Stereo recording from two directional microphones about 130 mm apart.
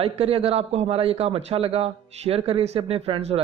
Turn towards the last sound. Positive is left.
turn(degrees=-50)  # may be behind; listen again after turning